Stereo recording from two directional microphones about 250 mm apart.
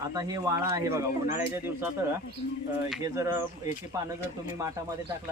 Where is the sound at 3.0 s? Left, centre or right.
Centre.